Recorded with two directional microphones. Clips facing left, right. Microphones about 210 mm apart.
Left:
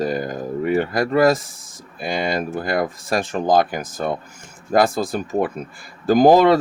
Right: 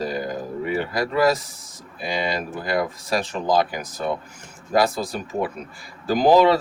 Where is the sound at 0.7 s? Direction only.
50° left (ahead or behind).